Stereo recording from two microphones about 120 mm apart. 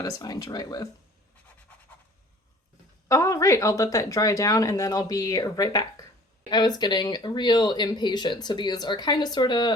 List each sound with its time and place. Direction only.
0.0 s speech: 30° left (ahead or behind)
3.1 s speech: 25° left (ahead or behind)